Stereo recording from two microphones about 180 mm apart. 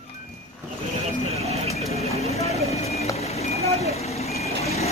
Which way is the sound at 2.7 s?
35° left (ahead or behind).